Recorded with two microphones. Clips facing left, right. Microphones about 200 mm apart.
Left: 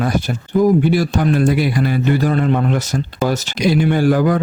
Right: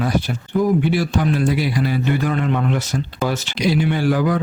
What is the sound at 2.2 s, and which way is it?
A man's voice, 35° left (ahead or behind).